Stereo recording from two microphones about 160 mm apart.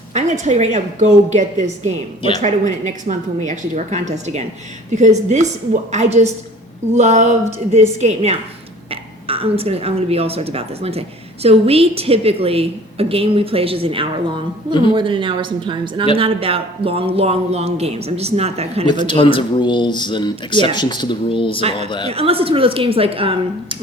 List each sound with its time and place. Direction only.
0.1 s a woman's voice: 50° right (ahead or behind)
19.0 s speech: 30° left (ahead or behind)
22.1 s speech: 40° right (ahead or behind)